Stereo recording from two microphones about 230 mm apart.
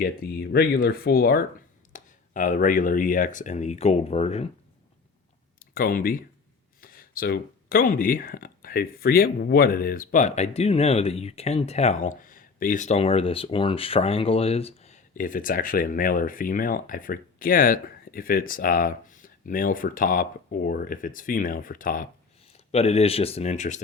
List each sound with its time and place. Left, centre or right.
0.0 s speech: left
5.5 s speech: left
22.7 s speech: left